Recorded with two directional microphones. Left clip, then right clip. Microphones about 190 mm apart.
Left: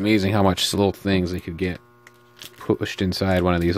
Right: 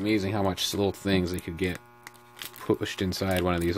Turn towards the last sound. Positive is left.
turn(degrees=25)  # may be behind; listen again after turning